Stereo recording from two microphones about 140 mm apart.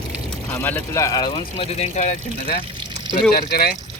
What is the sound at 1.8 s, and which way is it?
Speech, 60° left (ahead or behind).